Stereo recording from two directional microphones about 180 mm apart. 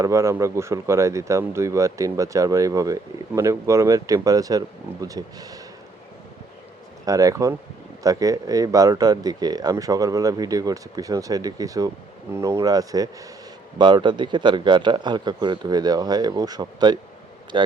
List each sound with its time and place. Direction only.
0.0 s speech: 15° right (ahead or behind)
7.0 s speech: 20° right (ahead or behind)